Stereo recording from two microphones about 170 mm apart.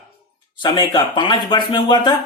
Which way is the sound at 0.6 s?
25° left (ahead or behind).